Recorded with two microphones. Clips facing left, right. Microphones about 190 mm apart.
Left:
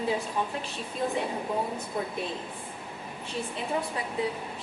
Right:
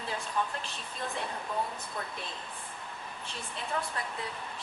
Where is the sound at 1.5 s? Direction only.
25° left (ahead or behind).